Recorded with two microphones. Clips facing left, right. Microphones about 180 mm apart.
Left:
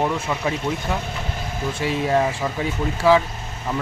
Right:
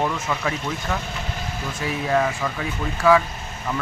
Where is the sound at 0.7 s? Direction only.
20° left (ahead or behind).